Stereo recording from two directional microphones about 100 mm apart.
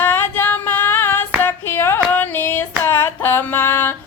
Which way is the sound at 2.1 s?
20° left (ahead or behind).